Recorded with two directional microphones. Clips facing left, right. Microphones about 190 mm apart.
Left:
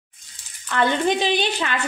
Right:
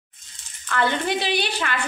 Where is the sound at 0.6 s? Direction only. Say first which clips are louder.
Left 3 dB; 20° left (ahead or behind).